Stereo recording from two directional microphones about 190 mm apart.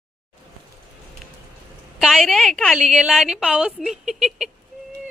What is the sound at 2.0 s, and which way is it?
A woman's voice, centre (ahead or behind).